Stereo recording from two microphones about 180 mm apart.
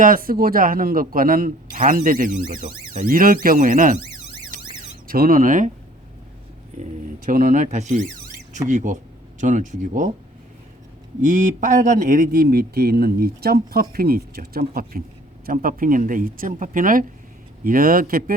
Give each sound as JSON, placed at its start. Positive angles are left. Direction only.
{"t": 0.0, "sound": "a man's voice", "side_deg": -50}
{"t": 4.5, "sound": "car alarm", "side_deg": -45}
{"t": 5.0, "sound": "a man's voice", "side_deg": -55}
{"t": 6.7, "sound": "a man's voice", "side_deg": -45}
{"t": 11.2, "sound": "a man's voice", "side_deg": -45}